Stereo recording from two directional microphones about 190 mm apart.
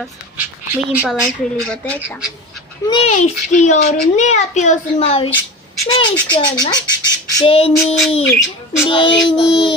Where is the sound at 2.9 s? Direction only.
35° left (ahead or behind).